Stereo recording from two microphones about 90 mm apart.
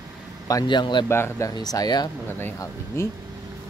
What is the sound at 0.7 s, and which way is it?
Speech, 60° left (ahead or behind).